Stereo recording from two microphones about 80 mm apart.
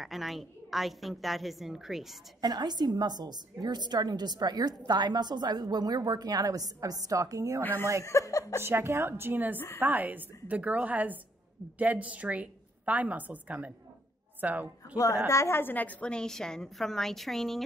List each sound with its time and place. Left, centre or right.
0.0 s a woman's voice: centre
2.4 s a woman's voice: right
8.0 s speech: left
8.6 s a woman's voice: right
15.0 s a woman's voice: left; by 17.6 s centre